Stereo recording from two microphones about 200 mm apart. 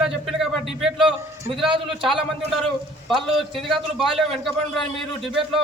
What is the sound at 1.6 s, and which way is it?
Speech, 25° right (ahead or behind).